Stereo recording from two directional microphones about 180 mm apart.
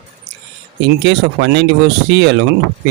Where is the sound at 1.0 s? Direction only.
75° right (ahead or behind).